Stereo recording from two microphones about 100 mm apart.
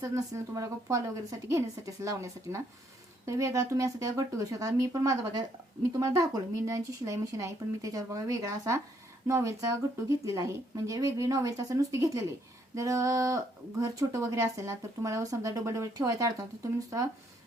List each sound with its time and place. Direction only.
0.0 s speech: 30° right (ahead or behind)